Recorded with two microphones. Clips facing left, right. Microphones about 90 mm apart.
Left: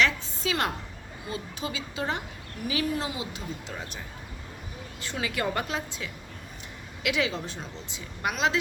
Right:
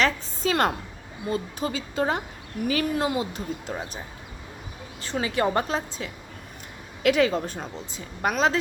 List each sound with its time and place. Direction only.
0.0 s a woman's voice: 45° right (ahead or behind)
3.7 s a woman's voice: 35° right (ahead or behind)
5.0 s a woman's voice: 35° right (ahead or behind)